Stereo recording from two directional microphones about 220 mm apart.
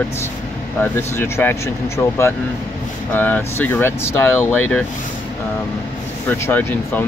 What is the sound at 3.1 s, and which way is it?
Speech, 10° left (ahead or behind).